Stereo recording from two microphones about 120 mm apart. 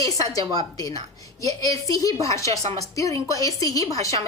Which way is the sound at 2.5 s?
60° right (ahead or behind).